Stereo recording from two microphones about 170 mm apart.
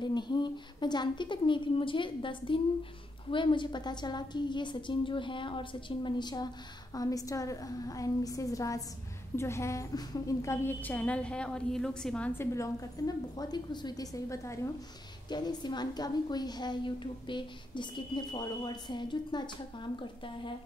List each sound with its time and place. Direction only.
0.0 s a woman's voice: 25° left (ahead or behind)